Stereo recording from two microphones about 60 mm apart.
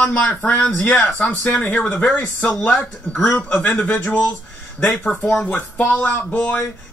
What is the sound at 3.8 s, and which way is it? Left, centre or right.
Speech, left.